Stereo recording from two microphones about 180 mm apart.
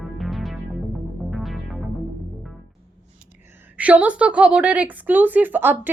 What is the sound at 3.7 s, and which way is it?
A woman's voice, 10° right (ahead or behind).